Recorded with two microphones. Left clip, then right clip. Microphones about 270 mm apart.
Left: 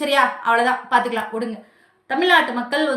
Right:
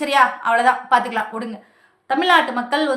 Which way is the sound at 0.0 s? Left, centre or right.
Centre.